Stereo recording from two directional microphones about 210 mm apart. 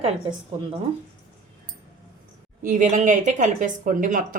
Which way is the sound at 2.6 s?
40° right (ahead or behind).